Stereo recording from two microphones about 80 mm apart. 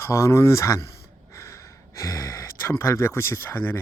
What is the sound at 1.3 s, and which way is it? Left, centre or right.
Gasp, left.